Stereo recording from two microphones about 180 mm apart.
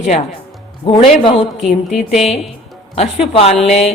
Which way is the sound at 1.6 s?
Centre (ahead or behind).